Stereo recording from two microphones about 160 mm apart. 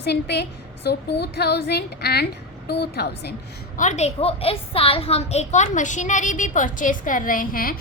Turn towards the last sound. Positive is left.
turn(degrees=60)  # may be behind; listen again after turning